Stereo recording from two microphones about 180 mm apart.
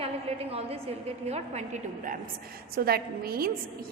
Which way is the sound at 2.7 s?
55° right (ahead or behind).